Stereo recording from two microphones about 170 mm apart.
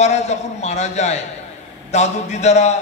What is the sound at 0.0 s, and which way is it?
A man's voice, 40° left (ahead or behind).